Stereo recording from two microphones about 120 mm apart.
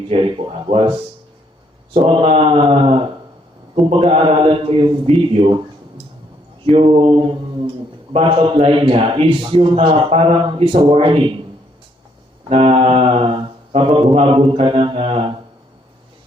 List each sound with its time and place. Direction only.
0.1 s a man's voice: 45° right (ahead or behind)
6.7 s a man's voice: 50° right (ahead or behind)
12.5 s a man's voice: 50° right (ahead or behind)